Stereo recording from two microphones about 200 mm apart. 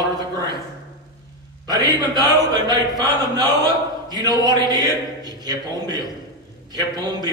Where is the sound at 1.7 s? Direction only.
20° right (ahead or behind).